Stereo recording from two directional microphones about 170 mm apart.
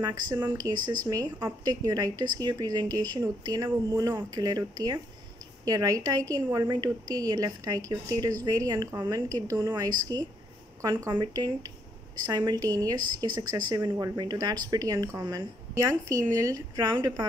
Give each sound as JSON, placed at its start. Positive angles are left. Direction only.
{"t": 0.0, "sound": "a woman's voice", "side_deg": -20}